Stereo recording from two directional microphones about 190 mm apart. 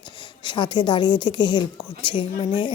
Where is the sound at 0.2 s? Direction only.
25° left (ahead or behind).